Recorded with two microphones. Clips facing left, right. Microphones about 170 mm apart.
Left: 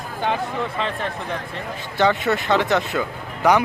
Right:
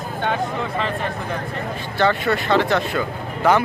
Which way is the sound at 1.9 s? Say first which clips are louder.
Even; 20° left (ahead or behind).